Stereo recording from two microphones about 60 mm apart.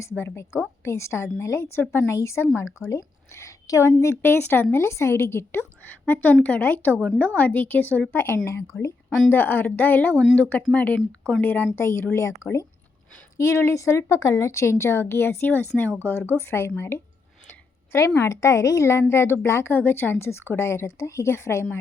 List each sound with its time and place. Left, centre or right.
0.2 s a woman's voice: left
2.1 s a woman's voice: left
4.0 s a woman's voice: left
6.1 s speech: left
8.7 s a woman's voice: left
9.3 s speech: left
12.1 s a woman's voice: left
16.0 s speech: left
17.9 s a woman's voice: left
19.7 s a woman's voice: left